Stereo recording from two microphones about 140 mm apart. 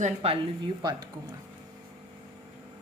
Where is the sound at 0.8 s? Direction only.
30° right (ahead or behind).